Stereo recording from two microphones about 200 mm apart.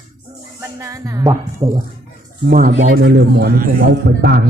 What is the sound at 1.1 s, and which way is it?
Speech, 20° right (ahead or behind).